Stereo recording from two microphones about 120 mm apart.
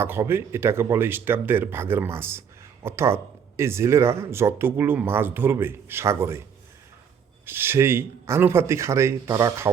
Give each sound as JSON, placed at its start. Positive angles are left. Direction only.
{"t": 0.0, "sound": "speech", "side_deg": -20}
{"t": 7.4, "sound": "speech", "side_deg": -20}